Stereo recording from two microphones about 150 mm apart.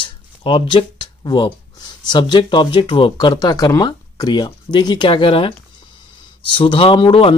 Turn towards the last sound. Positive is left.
turn(degrees=35)  # may be behind; listen again after turning